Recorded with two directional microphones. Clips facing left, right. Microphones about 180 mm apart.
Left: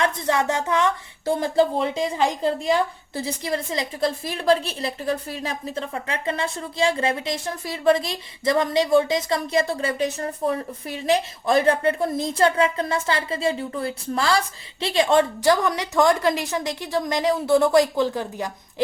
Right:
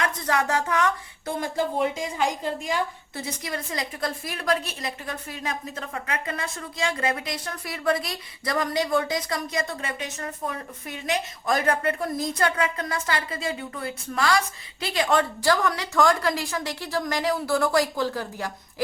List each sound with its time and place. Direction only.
0.0 s speech: 25° left (ahead or behind)